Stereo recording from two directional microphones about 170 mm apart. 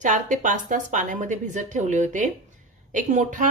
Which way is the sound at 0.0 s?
50° right (ahead or behind).